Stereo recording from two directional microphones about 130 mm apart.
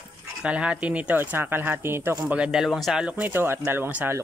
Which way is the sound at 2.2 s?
5° right (ahead or behind).